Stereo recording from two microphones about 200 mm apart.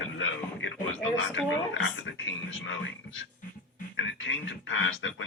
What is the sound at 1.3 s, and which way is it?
Speech, 70° left (ahead or behind).